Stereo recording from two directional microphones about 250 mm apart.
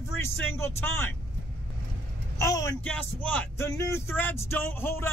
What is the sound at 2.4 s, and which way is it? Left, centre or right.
Speech, centre.